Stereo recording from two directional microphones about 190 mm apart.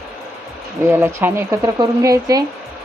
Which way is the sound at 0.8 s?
10° right (ahead or behind).